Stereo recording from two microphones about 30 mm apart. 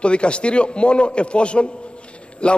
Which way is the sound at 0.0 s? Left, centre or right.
Left.